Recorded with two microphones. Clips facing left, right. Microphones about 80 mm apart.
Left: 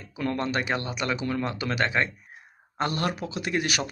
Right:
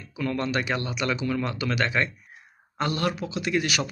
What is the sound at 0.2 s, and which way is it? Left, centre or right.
Speech, left.